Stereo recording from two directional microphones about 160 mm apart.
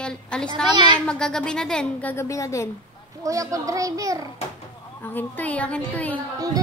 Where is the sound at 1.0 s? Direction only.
5° left (ahead or behind).